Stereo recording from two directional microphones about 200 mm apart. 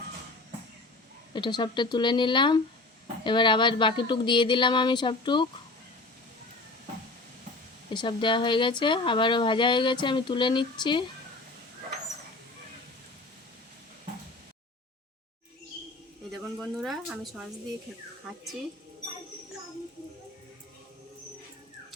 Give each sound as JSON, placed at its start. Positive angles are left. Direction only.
{"t": 1.3, "sound": "speech", "side_deg": 20}
{"t": 7.9, "sound": "speech", "side_deg": 25}
{"t": 16.3, "sound": "a sound", "side_deg": 0}